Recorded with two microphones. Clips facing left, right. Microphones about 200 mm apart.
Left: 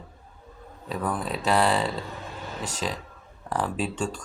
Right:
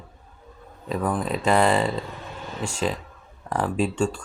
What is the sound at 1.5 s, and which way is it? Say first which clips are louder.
Speech: right 3 dB; centre (ahead or behind).